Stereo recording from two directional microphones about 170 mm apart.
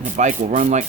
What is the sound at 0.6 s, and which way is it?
Speech, 45° right (ahead or behind).